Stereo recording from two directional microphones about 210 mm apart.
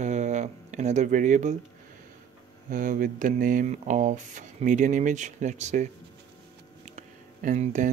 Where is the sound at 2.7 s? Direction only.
40° right (ahead or behind).